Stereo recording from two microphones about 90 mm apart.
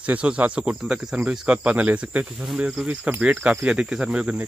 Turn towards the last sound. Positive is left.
turn(degrees=-10)  # may be behind; listen again after turning